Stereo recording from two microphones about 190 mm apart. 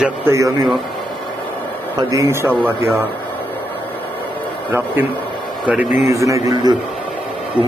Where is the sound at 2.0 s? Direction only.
20° right (ahead or behind).